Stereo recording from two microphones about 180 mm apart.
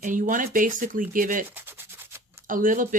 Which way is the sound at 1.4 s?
10° right (ahead or behind).